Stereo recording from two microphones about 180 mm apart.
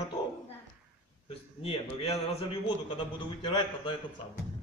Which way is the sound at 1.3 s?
30° left (ahead or behind).